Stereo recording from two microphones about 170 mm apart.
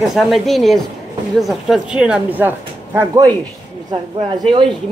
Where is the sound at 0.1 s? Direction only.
Centre (ahead or behind).